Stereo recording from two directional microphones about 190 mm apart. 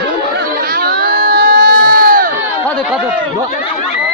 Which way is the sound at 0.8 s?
50° right (ahead or behind).